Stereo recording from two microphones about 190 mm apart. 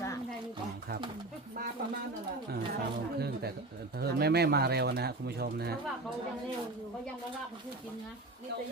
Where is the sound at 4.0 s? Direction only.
55° right (ahead or behind).